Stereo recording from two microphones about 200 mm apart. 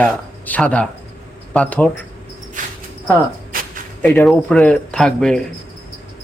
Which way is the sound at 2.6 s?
40° right (ahead or behind).